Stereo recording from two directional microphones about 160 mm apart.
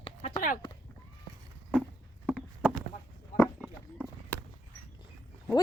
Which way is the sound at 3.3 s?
55° left (ahead or behind).